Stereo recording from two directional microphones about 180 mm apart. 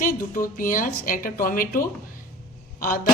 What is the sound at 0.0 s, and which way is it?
A woman's voice, 50° left (ahead or behind).